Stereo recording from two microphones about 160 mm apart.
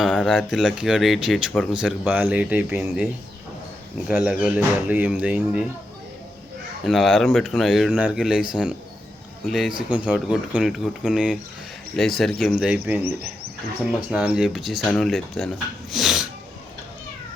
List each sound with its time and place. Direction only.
0.0 s speech: 5° right (ahead or behind)
0.3 s speech: 10° left (ahead or behind)
0.6 s speech: 5° right (ahead or behind)
4.1 s speech: 5° right (ahead or behind)
6.8 s speech: centre (ahead or behind)
14.1 s speech: 5° right (ahead or behind)